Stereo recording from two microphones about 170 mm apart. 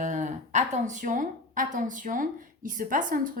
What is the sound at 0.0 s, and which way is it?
A woman's voice, 45° right (ahead or behind).